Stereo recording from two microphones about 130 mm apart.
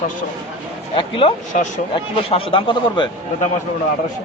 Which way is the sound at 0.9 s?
40° left (ahead or behind).